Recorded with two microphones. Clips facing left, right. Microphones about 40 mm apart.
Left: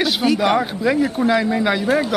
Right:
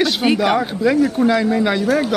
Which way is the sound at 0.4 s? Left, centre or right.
Centre.